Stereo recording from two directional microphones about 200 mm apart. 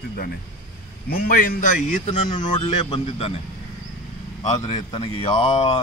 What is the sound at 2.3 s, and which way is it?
A man's voice, 30° left (ahead or behind).